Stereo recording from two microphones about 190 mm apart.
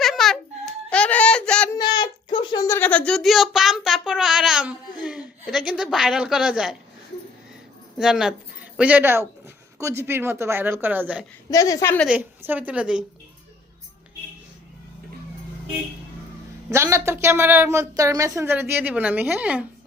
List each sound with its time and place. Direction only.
0.0 s baby cry: centre (ahead or behind)
0.9 s baby laughter: 5° left (ahead or behind)
1.8 s a sound: 25° left (ahead or behind); by 6.7 s 5° right (ahead or behind)
7.9 s a woman's voice: 5° right (ahead or behind)
11.5 s a woman's voice: 20° left (ahead or behind)
12.5 s a woman's voice: 10° right (ahead or behind)
16.7 s a woman's voice: 15° right (ahead or behind)